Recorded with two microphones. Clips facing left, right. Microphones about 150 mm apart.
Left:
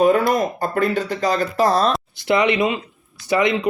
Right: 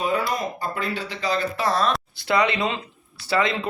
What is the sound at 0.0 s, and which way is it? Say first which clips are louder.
Speech: left 8 dB; 50° left (ahead or behind).